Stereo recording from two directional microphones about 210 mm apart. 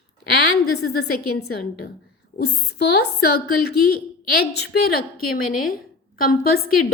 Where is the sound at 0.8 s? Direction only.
50° left (ahead or behind).